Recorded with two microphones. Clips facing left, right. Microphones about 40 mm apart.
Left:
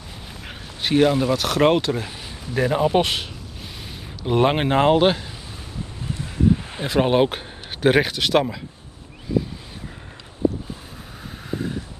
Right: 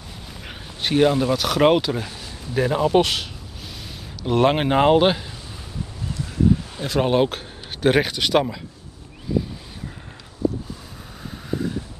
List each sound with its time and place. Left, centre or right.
0.5 s a man's voice: centre
2.8 s a man's voice: centre
6.1 s wind: left
6.9 s a man's voice: centre